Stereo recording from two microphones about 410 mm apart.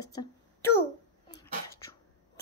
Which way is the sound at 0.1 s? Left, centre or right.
Centre.